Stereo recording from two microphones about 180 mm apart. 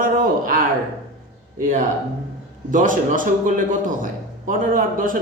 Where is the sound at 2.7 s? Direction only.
45° right (ahead or behind).